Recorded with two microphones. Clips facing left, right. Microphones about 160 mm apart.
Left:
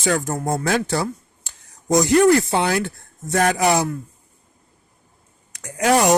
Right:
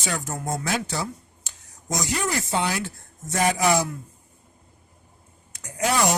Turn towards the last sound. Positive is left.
turn(degrees=70)  # may be behind; listen again after turning